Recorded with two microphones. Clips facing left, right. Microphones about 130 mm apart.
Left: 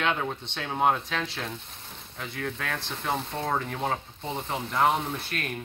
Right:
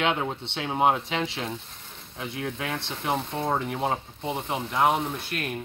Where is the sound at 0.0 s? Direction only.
20° right (ahead or behind).